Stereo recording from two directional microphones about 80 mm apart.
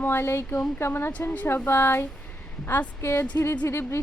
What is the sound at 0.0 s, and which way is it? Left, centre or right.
Speech, left.